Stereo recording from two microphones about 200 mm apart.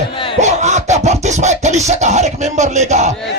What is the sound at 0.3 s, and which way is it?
Music, 35° right (ahead or behind).